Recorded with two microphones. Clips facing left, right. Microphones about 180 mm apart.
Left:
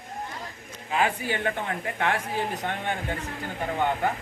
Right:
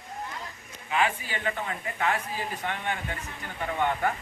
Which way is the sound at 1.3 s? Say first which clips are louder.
Left 4 dB; 55° left (ahead or behind).